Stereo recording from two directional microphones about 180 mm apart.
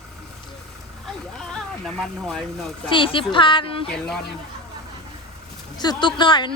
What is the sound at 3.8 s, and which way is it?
Speech, 5° left (ahead or behind).